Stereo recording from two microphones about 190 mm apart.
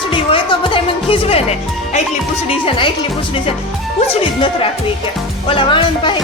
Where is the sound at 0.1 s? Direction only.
25° left (ahead or behind).